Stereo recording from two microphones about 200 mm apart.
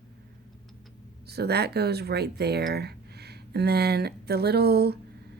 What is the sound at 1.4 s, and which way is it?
Speech, 55° right (ahead or behind).